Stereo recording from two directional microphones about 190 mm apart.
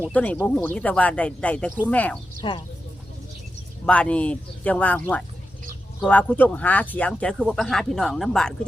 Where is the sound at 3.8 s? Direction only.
5° left (ahead or behind).